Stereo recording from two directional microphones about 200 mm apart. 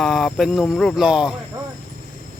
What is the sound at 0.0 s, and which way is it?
Speech, centre (ahead or behind).